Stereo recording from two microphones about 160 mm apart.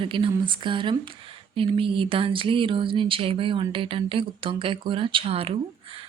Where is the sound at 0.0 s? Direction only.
30° right (ahead or behind).